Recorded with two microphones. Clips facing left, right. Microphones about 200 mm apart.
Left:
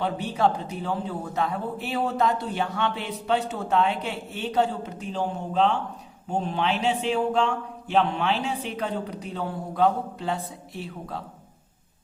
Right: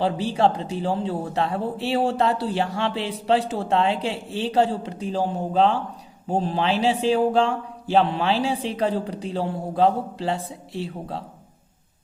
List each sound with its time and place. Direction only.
0.0 s speech: 30° right (ahead or behind)